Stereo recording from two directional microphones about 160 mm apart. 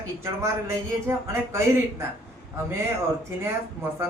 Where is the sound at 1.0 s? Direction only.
15° right (ahead or behind).